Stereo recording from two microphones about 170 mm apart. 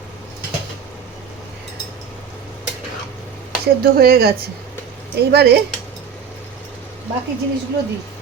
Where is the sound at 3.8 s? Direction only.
65° right (ahead or behind).